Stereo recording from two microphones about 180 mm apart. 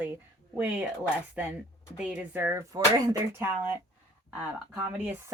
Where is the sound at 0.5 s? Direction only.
10° right (ahead or behind).